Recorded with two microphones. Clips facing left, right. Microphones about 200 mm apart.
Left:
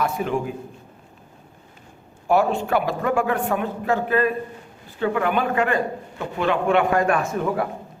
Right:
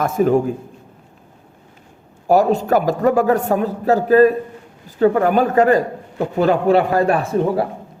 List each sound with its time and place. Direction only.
0.0 s a man's voice: 40° right (ahead or behind)
2.2 s a man's voice: 40° right (ahead or behind)